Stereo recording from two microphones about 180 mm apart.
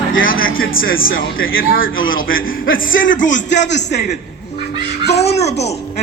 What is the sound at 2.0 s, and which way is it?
Speech, 90° left.